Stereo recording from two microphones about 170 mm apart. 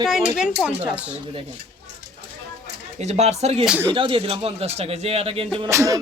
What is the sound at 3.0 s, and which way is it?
A man's voice, 40° right (ahead or behind).